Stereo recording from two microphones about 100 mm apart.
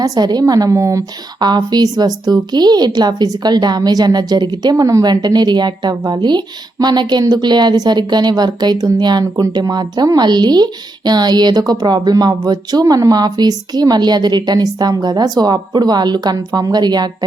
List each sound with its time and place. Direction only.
0.0 s a woman's voice: 40° right (ahead or behind)
1.4 s a woman's voice: 45° right (ahead or behind)